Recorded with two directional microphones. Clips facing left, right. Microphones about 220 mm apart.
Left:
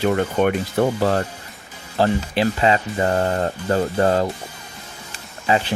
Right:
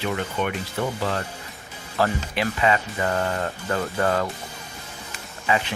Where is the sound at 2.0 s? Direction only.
30° left (ahead or behind).